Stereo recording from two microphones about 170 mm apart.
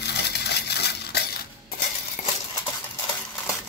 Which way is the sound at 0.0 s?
75° left (ahead or behind).